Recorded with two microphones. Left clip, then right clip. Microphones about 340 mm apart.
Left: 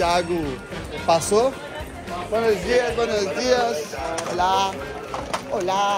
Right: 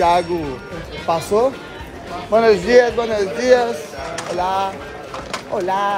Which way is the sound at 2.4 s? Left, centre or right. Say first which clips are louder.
Right 7 dB; right.